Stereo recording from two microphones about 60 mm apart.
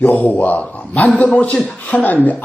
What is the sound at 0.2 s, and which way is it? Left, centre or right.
Speech, left.